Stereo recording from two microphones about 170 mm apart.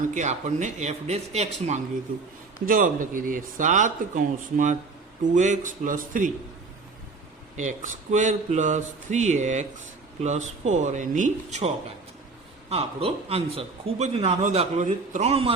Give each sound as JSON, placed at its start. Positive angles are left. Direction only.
{"t": 0.1, "sound": "speech", "side_deg": -45}
{"t": 2.6, "sound": "speech", "side_deg": -55}
{"t": 7.5, "sound": "speech", "side_deg": -45}
{"t": 12.7, "sound": "a man's voice", "side_deg": -35}